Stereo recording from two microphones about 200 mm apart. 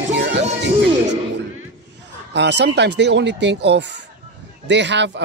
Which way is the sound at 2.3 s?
60° right (ahead or behind).